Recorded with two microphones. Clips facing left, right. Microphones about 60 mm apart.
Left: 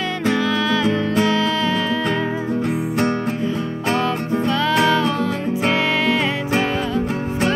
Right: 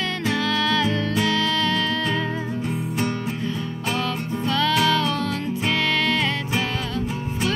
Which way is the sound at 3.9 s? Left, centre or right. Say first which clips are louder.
Left 7 dB; left.